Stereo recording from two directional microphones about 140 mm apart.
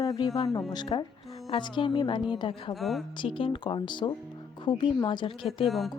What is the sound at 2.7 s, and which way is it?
Music, centre (ahead or behind).